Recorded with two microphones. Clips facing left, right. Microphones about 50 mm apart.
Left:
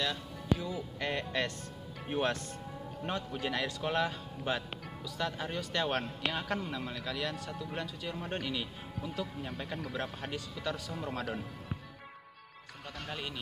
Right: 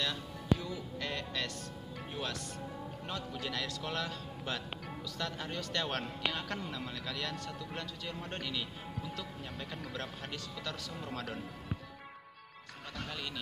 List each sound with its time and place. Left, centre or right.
0.0 s speech: centre; by 1.5 s left
2.0 s a man's voice: left; by 11.2 s centre